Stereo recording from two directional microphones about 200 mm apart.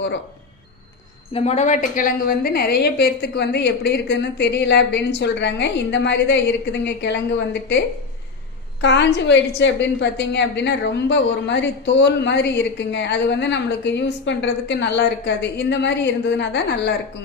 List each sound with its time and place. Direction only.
1.3 s a woman's voice: 35° left (ahead or behind); by 7.8 s 60° left (ahead or behind)
8.8 s a woman's voice: 60° left (ahead or behind)